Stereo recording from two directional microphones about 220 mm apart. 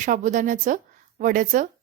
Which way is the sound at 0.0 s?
35° right (ahead or behind).